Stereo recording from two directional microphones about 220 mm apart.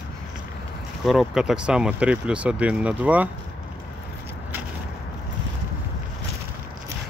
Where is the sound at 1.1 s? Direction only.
Centre (ahead or behind).